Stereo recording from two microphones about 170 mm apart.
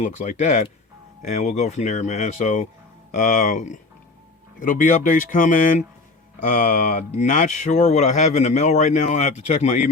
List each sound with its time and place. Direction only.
0.0 s speech: 45° left (ahead or behind)